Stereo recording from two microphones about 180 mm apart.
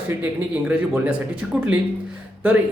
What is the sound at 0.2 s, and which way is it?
Speech, 10° right (ahead or behind).